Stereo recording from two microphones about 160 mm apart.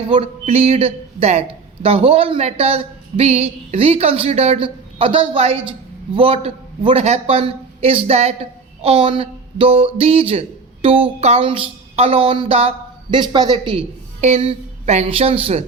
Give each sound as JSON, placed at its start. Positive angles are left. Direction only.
{"t": 0.1, "sound": "a man's voice", "side_deg": -35}
{"t": 14.2, "sound": "a man's voice", "side_deg": -45}